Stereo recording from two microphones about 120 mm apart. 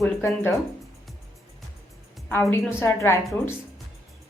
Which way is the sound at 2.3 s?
20° left (ahead or behind).